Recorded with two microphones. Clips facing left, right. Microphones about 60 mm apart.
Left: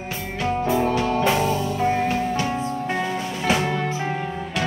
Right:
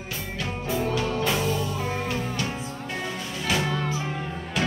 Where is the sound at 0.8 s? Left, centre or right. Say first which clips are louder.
Left 5 dB; left.